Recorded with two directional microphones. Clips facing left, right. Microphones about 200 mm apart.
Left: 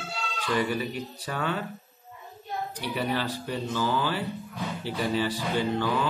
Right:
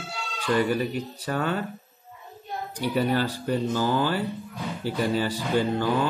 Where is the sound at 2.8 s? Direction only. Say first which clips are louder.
Right 6 dB; 45° right (ahead or behind).